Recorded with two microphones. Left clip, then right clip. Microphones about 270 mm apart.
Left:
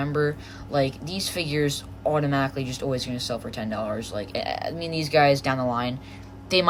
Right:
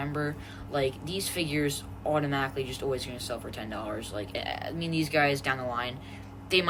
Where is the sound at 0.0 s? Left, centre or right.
Centre.